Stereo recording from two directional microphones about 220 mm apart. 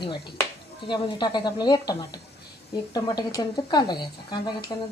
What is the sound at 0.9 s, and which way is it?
Speech, 20° left (ahead or behind).